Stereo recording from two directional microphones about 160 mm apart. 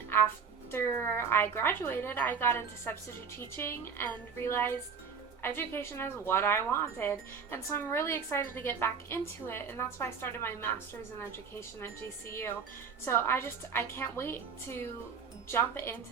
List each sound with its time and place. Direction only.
0.1 s a woman's voice: 15° left (ahead or behind)
11.8 s a woman's voice: 15° left (ahead or behind)
15.5 s a woman's voice: 15° left (ahead or behind)